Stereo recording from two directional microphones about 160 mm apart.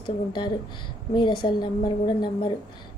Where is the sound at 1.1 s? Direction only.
30° left (ahead or behind).